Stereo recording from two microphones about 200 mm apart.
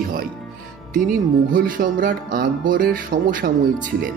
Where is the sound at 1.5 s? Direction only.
45° right (ahead or behind).